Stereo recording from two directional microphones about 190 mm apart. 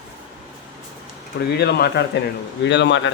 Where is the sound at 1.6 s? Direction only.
60° left (ahead or behind).